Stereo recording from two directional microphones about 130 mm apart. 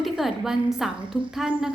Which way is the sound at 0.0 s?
Centre (ahead or behind).